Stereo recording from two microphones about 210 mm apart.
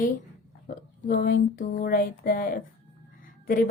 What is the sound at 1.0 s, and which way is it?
A woman's voice, 40° left (ahead or behind).